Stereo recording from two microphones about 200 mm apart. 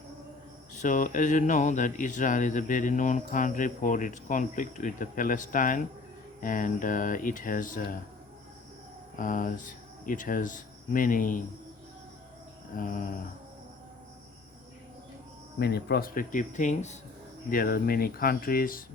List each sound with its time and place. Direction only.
0.7 s speech: 40° left (ahead or behind)
9.1 s speech: 40° left (ahead or behind)
12.7 s speech: 40° left (ahead or behind)
15.5 s speech: 55° left (ahead or behind); by 17.0 s 35° left (ahead or behind)
17.5 s speech: 45° left (ahead or behind)